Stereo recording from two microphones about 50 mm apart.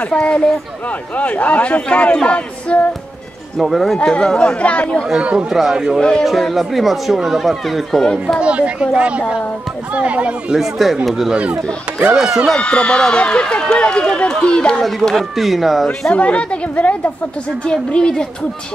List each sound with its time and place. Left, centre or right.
0.0 s speech: left
3.6 s speech: centre
4.1 s speech: centre
5.1 s speech: right
5.5 s speech: centre
5.9 s a woman's voice: centre
6.2 s speech: centre
8.4 s speech: right
10.5 s speech: centre
12.5 s speech: centre
14.8 s speech: centre
16.1 s speech: left
17.6 s a woman's voice: centre